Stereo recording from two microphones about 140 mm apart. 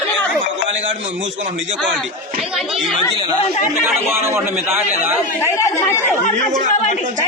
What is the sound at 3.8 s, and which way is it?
A man's voice, 15° right (ahead or behind).